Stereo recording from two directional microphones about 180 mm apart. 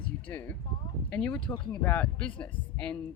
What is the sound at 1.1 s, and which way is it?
Speech, 5° left (ahead or behind).